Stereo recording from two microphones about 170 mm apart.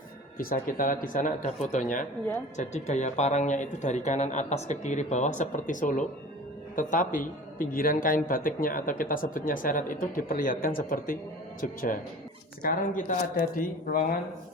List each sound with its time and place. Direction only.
0.3 s speech: 55° left (ahead or behind)